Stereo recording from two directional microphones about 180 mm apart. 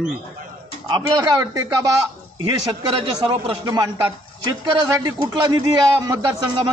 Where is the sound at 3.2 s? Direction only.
25° right (ahead or behind).